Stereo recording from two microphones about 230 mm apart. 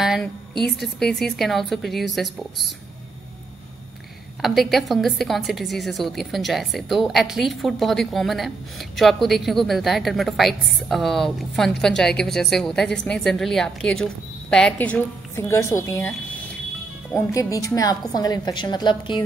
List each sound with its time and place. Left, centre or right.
0.0 s a woman's voice: centre
4.4 s a woman's voice: centre